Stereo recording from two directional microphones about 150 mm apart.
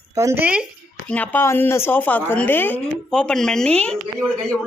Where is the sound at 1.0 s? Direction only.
10° left (ahead or behind).